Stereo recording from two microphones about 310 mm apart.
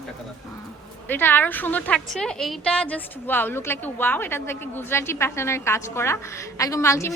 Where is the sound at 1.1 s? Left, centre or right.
Centre.